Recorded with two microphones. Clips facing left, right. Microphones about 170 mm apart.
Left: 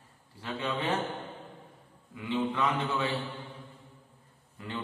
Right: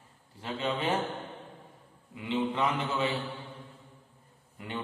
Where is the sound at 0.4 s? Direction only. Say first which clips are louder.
Right 1 dB; 25° right (ahead or behind).